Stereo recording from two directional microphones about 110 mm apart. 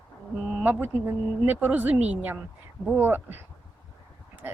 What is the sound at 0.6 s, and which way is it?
Speech, 15° right (ahead or behind).